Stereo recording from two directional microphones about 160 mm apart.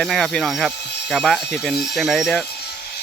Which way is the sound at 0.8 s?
90° left.